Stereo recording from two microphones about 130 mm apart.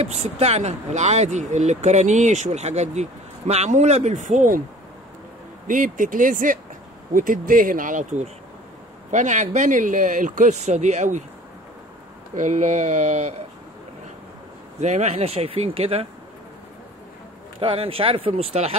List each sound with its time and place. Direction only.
0.0 s speech: 55° right (ahead or behind); by 4.6 s 70° right (ahead or behind)
5.7 s speech: 90° right; by 11.2 s 65° right (ahead or behind)
12.4 s speech: 70° right (ahead or behind)
14.8 s speech: 60° right (ahead or behind)
17.6 s speech: 45° right (ahead or behind)